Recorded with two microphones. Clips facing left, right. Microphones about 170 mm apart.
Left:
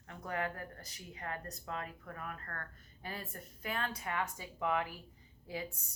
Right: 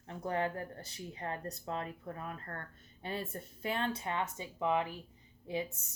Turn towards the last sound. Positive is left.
turn(degrees=-25)  # may be behind; listen again after turning